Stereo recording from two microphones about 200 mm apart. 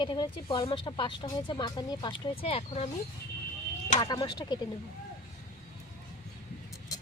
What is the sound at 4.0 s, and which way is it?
Speech, 20° left (ahead or behind).